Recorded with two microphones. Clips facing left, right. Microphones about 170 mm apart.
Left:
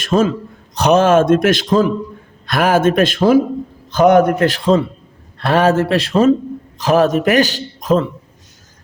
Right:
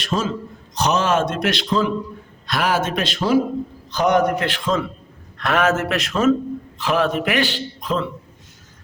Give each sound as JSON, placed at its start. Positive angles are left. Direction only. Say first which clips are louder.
{"t": 0.0, "sound": "a man's voice", "louder": "left 8 dB", "side_deg": 50}